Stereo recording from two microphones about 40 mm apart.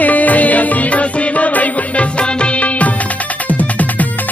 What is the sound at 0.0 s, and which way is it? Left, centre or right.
Music, left.